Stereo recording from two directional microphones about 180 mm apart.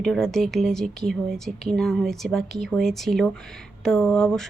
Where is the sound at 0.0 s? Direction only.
5° left (ahead or behind).